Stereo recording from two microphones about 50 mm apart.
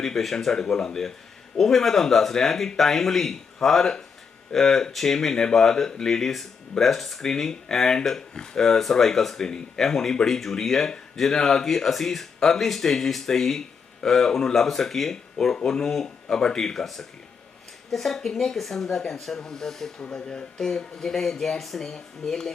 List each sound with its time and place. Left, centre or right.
0.0 s speech: centre
20.0 s speech: left
20.7 s speech: centre